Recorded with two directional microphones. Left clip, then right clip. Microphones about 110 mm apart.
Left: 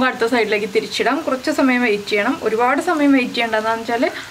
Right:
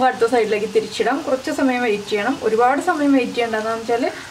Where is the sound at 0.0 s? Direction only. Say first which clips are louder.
Right 1 dB; 35° left (ahead or behind).